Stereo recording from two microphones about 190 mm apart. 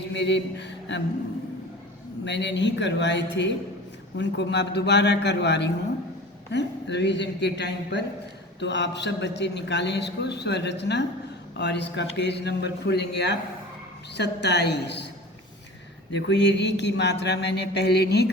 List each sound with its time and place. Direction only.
0.1 s a man's voice: 65° left (ahead or behind)
2.2 s a man's voice: 65° left (ahead or behind)
16.1 s a man's voice: 65° left (ahead or behind)